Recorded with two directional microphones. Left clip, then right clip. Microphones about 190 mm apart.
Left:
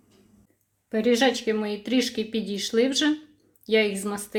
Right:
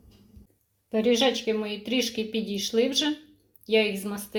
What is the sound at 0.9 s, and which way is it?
A woman's voice, 25° left (ahead or behind).